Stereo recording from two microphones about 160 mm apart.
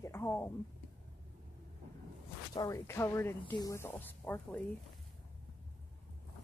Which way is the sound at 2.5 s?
20° left (ahead or behind).